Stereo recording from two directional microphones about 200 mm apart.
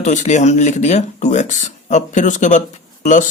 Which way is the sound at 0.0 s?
35° left (ahead or behind).